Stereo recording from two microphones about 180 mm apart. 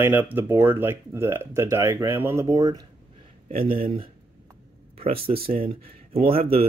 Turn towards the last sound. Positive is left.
turn(degrees=-30)  # may be behind; listen again after turning